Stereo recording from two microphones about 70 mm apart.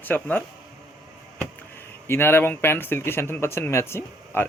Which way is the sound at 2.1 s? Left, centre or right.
Left.